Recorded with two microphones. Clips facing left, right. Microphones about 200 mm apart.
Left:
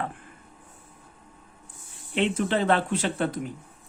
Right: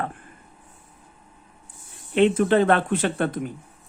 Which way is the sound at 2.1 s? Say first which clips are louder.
Right 7 dB; 50° right (ahead or behind).